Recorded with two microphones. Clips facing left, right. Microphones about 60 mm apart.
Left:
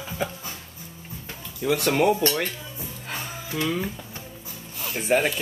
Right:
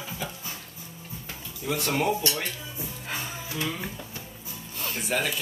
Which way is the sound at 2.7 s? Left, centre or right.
Centre.